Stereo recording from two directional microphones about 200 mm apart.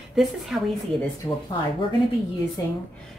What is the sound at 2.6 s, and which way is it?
Speech, 15° left (ahead or behind).